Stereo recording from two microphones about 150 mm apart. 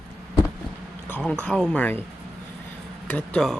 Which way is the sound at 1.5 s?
5° left (ahead or behind).